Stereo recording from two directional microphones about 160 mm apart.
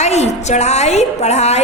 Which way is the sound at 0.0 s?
45° left (ahead or behind).